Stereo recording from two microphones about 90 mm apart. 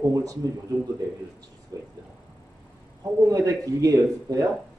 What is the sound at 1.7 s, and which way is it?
Speech, 40° right (ahead or behind).